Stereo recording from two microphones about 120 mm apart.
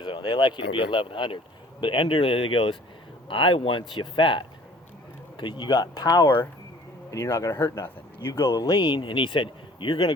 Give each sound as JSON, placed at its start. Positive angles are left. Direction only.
{"t": 0.0, "sound": "speech", "side_deg": 40}
{"t": 7.1, "sound": "speech", "side_deg": 25}